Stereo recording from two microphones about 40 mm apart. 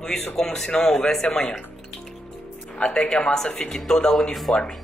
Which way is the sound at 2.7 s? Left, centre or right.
Left.